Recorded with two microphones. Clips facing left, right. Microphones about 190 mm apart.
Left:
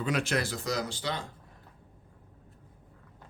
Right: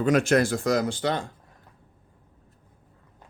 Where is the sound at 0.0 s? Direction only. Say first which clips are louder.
Right 9 dB; 45° right (ahead or behind).